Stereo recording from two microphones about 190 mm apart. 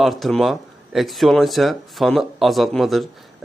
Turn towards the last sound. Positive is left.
turn(degrees=0)  # may be behind; listen again after turning